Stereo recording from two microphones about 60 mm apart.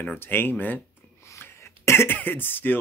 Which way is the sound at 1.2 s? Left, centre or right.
Left.